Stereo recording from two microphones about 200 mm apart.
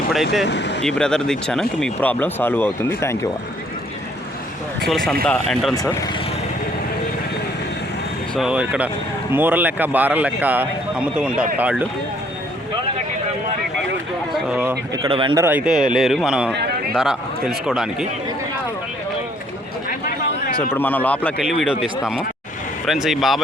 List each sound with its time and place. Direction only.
0.4 s speech: 60° left (ahead or behind)
0.9 s speech: 5° left (ahead or behind)
4.9 s speech: centre (ahead or behind)
8.4 s speech: 5° right (ahead or behind)
14.3 s speech: 5° right (ahead or behind)
15.1 s speech: 25° right (ahead or behind)
15.4 s speech: 5° right (ahead or behind)
20.7 s speech: 10° left (ahead or behind)